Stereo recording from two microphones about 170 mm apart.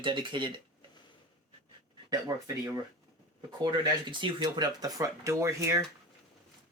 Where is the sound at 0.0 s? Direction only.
30° right (ahead or behind).